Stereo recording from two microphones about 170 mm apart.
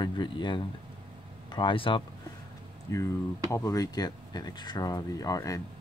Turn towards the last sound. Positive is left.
turn(degrees=20)  # may be behind; listen again after turning